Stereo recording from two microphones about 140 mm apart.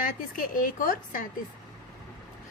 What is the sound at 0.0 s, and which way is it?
A woman's voice, 75° left (ahead or behind).